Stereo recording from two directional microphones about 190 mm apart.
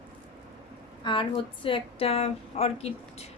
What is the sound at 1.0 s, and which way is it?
A woman's voice, 25° left (ahead or behind).